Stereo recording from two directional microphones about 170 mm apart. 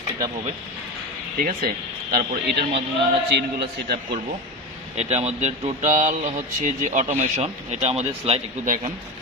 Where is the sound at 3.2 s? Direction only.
80° right.